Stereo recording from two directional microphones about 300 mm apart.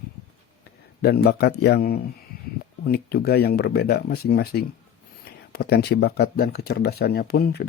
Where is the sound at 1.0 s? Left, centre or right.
Left.